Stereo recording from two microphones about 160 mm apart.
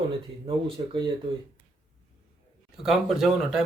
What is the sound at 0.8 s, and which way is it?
Speech, 30° right (ahead or behind).